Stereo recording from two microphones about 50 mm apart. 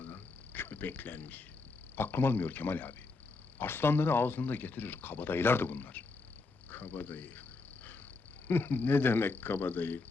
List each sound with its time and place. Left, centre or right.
0.0 s a sound: left
2.0 s speech: left
8.4 s speech: left